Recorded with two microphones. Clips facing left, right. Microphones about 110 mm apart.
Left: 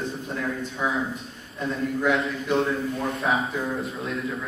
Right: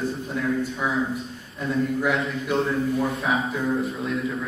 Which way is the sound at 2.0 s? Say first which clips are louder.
Left 1 dB; centre (ahead or behind).